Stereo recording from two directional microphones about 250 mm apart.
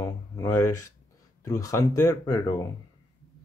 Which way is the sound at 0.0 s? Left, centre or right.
Centre.